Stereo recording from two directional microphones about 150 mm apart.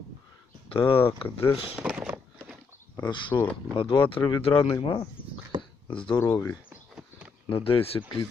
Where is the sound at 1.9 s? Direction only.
5° right (ahead or behind).